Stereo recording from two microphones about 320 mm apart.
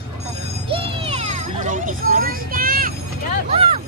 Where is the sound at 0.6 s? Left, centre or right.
Centre.